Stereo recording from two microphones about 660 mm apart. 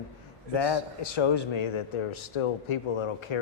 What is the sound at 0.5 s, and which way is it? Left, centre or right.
A man's voice, left.